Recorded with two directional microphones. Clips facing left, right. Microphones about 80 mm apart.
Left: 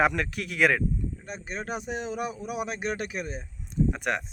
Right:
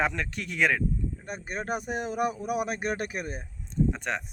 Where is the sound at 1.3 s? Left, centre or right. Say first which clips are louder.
Right 1 dB; centre.